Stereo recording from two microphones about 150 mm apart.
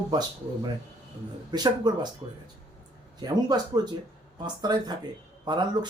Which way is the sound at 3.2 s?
25° right (ahead or behind).